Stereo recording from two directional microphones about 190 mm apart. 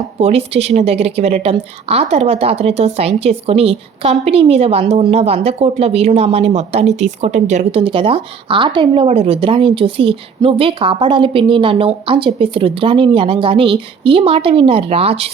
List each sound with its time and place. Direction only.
0.2 s a woman's voice: 35° right (ahead or behind)